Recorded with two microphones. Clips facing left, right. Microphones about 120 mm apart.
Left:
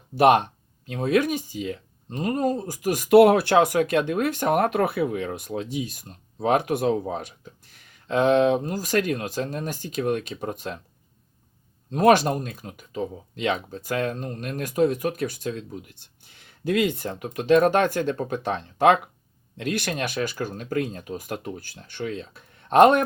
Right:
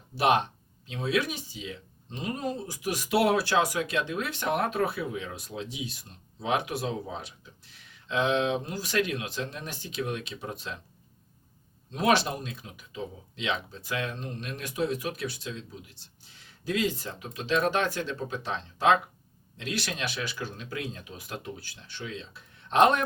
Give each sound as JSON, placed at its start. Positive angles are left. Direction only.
{"t": 0.2, "sound": "speech", "side_deg": 50}
{"t": 11.9, "sound": "speech", "side_deg": 50}